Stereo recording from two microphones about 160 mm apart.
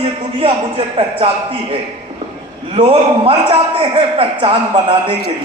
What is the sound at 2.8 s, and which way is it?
A man's voice, 35° right (ahead or behind).